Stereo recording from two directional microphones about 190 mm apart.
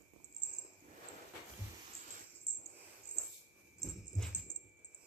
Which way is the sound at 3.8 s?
Centre (ahead or behind).